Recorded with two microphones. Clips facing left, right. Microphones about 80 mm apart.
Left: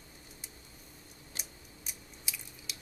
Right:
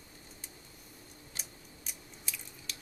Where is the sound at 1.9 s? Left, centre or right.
Centre.